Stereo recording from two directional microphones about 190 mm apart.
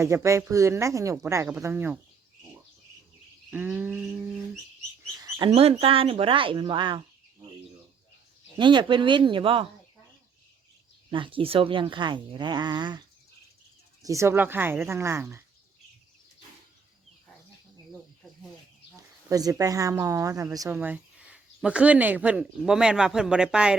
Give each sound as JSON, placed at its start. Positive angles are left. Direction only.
{"t": 0.0, "sound": "speech", "side_deg": -15}
{"t": 3.5, "sound": "speech", "side_deg": -10}
{"t": 5.5, "sound": "speech", "side_deg": -30}
{"t": 8.5, "sound": "speech", "side_deg": -25}
{"t": 11.1, "sound": "speech", "side_deg": -25}
{"t": 14.0, "sound": "speech", "side_deg": -15}
{"t": 19.3, "sound": "speech", "side_deg": -20}